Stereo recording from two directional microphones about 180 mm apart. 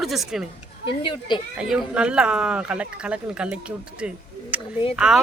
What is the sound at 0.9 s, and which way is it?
Speech, 30° left (ahead or behind).